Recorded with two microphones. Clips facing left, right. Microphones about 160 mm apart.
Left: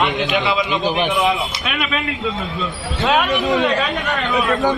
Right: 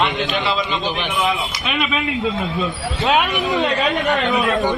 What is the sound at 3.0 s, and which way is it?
Speech, centre (ahead or behind).